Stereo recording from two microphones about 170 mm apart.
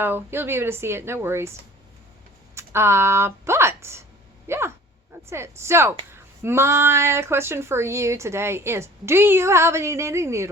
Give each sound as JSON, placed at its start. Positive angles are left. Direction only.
{"t": 0.0, "sound": "speech", "side_deg": -15}
{"t": 2.6, "sound": "speech", "side_deg": -15}
{"t": 4.4, "sound": "dog", "side_deg": -15}
{"t": 5.3, "sound": "speech", "side_deg": -15}